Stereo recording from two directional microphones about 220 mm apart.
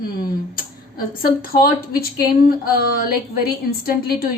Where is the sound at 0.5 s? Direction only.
40° left (ahead or behind).